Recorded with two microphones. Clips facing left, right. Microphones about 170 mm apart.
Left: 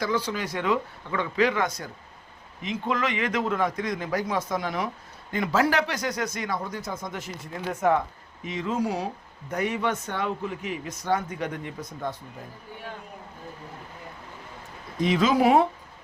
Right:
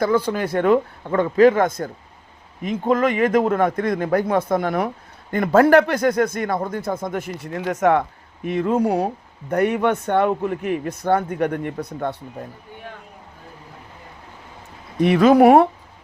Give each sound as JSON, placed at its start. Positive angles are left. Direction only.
{"t": 0.0, "sound": "speech", "side_deg": -55}
{"t": 8.4, "sound": "speech", "side_deg": -55}
{"t": 14.9, "sound": "speech", "side_deg": -60}